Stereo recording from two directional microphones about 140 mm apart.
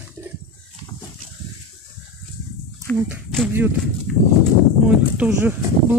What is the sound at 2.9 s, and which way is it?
Speech, 10° left (ahead or behind).